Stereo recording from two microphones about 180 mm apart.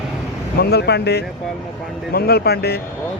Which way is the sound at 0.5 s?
65° left (ahead or behind).